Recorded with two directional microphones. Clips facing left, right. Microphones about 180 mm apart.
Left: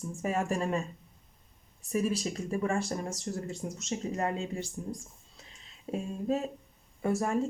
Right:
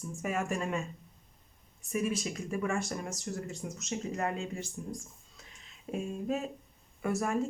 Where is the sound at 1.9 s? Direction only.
35° left (ahead or behind).